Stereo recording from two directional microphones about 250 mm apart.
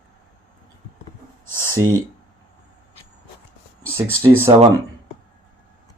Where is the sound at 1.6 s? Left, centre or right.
Centre.